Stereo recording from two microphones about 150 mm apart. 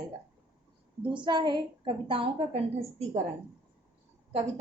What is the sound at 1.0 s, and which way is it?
A woman's voice, 30° right (ahead or behind).